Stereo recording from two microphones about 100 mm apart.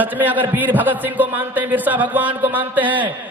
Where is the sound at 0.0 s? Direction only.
15° right (ahead or behind).